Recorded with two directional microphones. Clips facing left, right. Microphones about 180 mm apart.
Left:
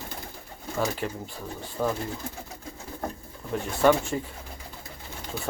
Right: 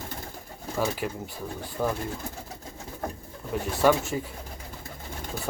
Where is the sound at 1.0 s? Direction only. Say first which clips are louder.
Right 1 dB; 10° right (ahead or behind).